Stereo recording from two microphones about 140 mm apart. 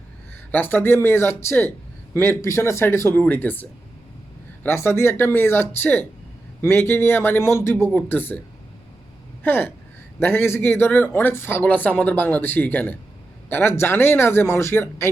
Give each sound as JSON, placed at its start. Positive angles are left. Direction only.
{"t": 0.5, "sound": "speech", "side_deg": 15}
{"t": 9.4, "sound": "speech", "side_deg": 15}